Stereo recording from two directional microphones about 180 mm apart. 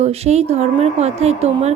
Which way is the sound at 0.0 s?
35° right (ahead or behind).